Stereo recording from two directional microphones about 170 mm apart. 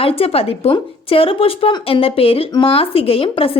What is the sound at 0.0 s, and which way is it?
A woman's voice, 35° left (ahead or behind).